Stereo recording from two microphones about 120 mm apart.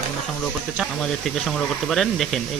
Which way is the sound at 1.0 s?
5° left (ahead or behind).